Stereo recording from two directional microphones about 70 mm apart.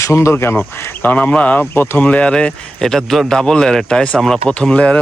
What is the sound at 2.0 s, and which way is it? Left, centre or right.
Speech, centre.